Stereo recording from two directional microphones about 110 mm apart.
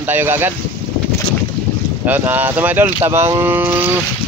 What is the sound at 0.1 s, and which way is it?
Speech, 20° right (ahead or behind).